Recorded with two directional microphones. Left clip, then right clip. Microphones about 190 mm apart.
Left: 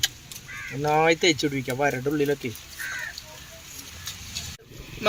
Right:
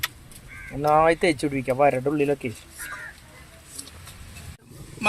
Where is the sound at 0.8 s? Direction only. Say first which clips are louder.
Right 2 dB; 20° right (ahead or behind).